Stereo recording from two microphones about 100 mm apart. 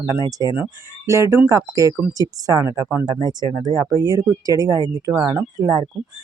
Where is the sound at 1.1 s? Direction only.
30° right (ahead or behind).